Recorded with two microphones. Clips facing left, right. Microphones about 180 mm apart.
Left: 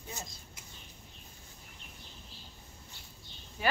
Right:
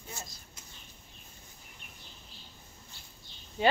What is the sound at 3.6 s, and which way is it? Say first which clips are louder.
Speech: right 6 dB; 25° right (ahead or behind).